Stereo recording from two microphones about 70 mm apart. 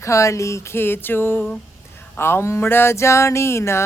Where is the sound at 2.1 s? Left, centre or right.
Left.